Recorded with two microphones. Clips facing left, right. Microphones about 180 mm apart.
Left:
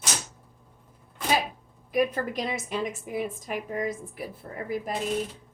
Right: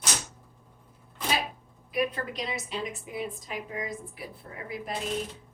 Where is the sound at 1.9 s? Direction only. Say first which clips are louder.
Left 4 dB; 45° left (ahead or behind).